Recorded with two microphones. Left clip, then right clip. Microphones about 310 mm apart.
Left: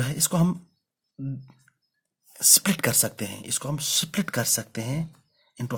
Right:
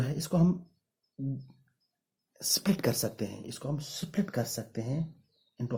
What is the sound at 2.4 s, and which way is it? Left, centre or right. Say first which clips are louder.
Speech: left 8 dB; left.